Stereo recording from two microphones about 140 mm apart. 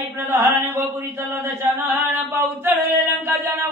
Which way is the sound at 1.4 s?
20° right (ahead or behind).